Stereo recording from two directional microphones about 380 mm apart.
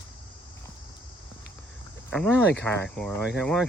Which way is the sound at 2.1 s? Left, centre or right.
Centre.